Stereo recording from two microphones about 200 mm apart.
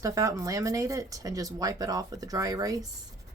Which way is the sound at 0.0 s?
15° right (ahead or behind).